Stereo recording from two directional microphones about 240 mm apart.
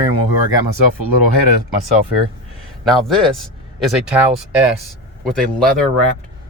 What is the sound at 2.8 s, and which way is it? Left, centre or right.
Speech, centre.